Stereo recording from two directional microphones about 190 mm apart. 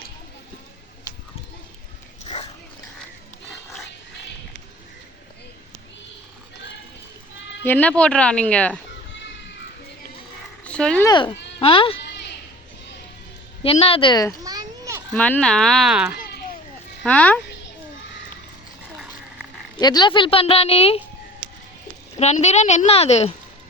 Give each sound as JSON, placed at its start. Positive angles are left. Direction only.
{"t": 2.2, "sound": "dog", "side_deg": 35}
{"t": 7.6, "sound": "speech", "side_deg": 10}
{"t": 10.6, "sound": "a sound", "side_deg": 5}
{"t": 11.0, "sound": "speech", "side_deg": 25}
{"t": 12.0, "sound": "a sound", "side_deg": 65}
{"t": 13.6, "sound": "speech", "side_deg": 30}
{"t": 14.4, "sound": "children playing", "side_deg": -15}
{"t": 15.1, "sound": "speech", "side_deg": 10}
{"t": 17.0, "sound": "speech", "side_deg": 5}
{"t": 19.8, "sound": "speech", "side_deg": 20}
{"t": 22.1, "sound": "a woman's voice", "side_deg": 35}